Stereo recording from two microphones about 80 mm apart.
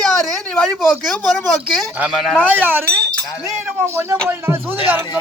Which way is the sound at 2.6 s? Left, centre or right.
Right.